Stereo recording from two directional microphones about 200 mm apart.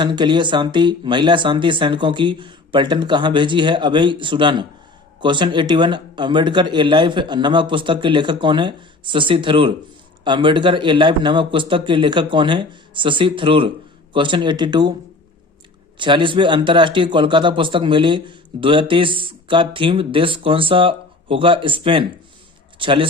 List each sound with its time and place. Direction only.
0.0 s a man's voice: 20° right (ahead or behind)
16.0 s a man's voice: 25° right (ahead or behind)